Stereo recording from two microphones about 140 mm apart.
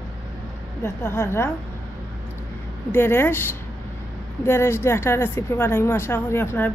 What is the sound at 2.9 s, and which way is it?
Speech, 15° left (ahead or behind).